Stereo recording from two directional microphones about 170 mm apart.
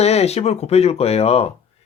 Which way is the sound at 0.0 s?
40° left (ahead or behind).